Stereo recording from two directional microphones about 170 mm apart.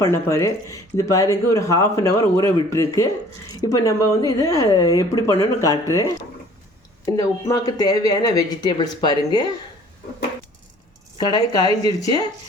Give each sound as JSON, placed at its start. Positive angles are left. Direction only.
{"t": 0.0, "sound": "speech", "side_deg": 15}
{"t": 11.2, "sound": "speech", "side_deg": 25}